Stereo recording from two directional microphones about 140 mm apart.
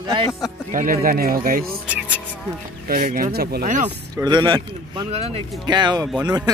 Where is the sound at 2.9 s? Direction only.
85° right.